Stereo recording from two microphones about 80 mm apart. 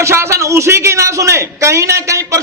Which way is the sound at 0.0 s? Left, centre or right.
Right.